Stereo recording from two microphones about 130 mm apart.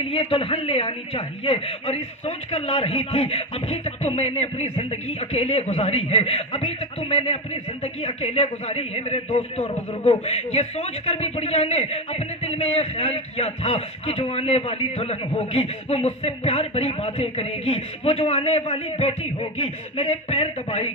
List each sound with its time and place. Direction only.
0.0 s a man's voice: 45° left (ahead or behind)